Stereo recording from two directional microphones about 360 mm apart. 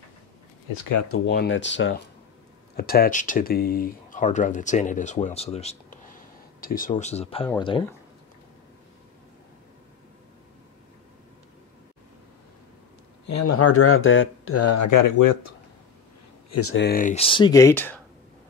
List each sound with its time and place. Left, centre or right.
1.0 s speech: left; by 7.8 s centre
13.3 s speech: left
16.4 s speech: left; by 17.9 s centre